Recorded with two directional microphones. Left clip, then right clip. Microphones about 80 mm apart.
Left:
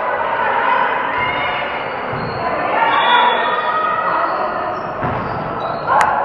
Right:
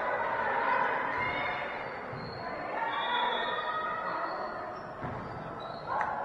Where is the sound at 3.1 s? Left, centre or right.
Centre.